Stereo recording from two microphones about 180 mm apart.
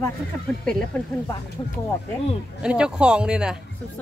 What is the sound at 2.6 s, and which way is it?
Speech, 5° right (ahead or behind).